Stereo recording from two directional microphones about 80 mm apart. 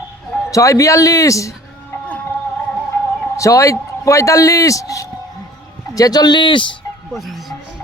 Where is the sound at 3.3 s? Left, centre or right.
Left.